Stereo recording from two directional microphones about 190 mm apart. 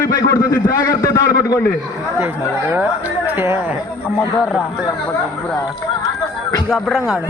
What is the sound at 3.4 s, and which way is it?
Speech, 10° right (ahead or behind).